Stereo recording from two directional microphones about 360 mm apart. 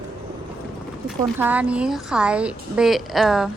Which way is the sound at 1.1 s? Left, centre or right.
Centre.